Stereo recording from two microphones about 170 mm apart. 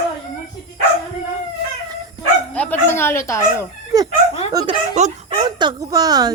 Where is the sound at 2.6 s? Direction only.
10° left (ahead or behind).